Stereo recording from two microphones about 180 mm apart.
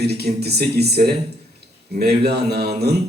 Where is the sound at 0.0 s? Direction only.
65° right (ahead or behind).